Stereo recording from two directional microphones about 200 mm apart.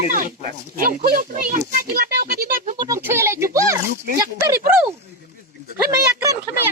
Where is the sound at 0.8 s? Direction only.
45° right (ahead or behind).